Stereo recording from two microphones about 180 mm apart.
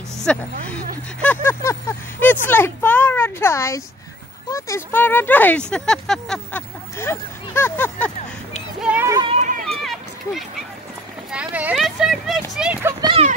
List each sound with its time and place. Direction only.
0.3 s speech: 5° left (ahead or behind)
7.0 s speech: 15° left (ahead or behind)
8.8 s a sound: 10° right (ahead or behind)
9.1 s a sound: 25° right (ahead or behind)
9.7 s run: centre (ahead or behind)
11.3 s speech: 5° right (ahead or behind)
13.0 s speech: 30° right (ahead or behind)